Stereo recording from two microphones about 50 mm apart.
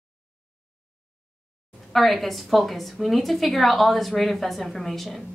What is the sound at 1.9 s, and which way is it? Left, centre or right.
A woman's voice, centre.